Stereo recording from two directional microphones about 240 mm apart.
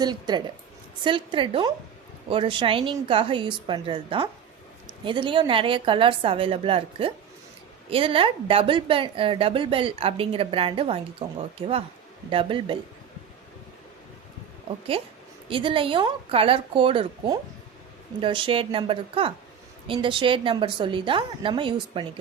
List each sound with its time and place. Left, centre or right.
0.0 s speech: centre
15.4 s speech: right